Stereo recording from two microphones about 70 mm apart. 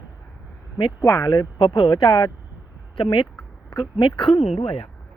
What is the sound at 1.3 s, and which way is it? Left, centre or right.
Speech, left.